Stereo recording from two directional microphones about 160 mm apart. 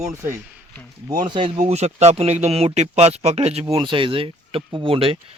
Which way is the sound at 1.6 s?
45° right (ahead or behind).